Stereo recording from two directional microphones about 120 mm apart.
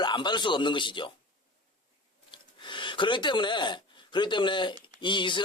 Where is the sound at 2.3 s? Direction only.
40° left (ahead or behind).